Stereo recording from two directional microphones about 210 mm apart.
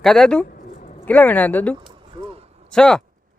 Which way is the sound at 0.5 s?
40° left (ahead or behind).